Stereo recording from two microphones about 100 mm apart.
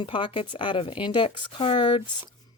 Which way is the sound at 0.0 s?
55° left (ahead or behind).